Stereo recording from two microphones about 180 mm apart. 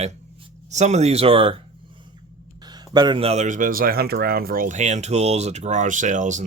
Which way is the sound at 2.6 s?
25° right (ahead or behind).